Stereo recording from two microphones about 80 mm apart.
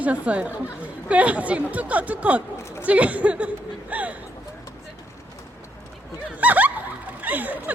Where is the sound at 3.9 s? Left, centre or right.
Centre.